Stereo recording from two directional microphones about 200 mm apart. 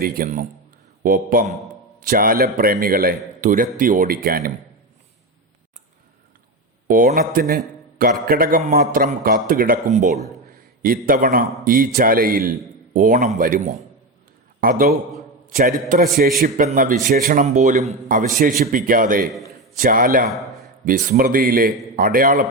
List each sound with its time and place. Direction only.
0.0 s a man's voice: 45° right (ahead or behind)
6.8 s a man's voice: 45° right (ahead or behind)
20.3 s a sound: centre (ahead or behind)
20.8 s a man's voice: 40° right (ahead or behind)